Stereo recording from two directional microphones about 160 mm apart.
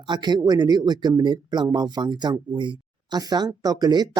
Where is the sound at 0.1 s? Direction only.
25° right (ahead or behind).